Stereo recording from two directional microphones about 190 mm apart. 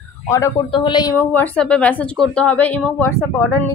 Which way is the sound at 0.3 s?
15° left (ahead or behind).